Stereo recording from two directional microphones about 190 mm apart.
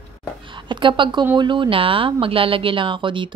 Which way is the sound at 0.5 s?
25° right (ahead or behind).